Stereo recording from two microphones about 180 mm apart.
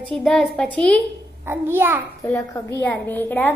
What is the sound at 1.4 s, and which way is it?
Speech, 15° right (ahead or behind).